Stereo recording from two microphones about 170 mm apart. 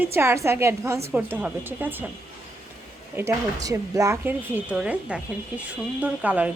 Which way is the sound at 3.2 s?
20° right (ahead or behind).